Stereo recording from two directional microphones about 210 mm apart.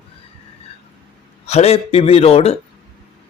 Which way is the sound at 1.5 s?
30° left (ahead or behind).